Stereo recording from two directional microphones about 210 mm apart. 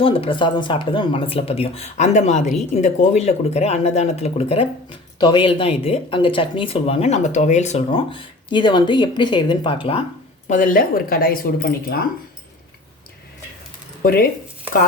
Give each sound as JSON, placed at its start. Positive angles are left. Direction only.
{"t": 0.0, "sound": "speech", "side_deg": 25}
{"t": 10.5, "sound": "speech", "side_deg": 40}
{"t": 14.0, "sound": "speech", "side_deg": 45}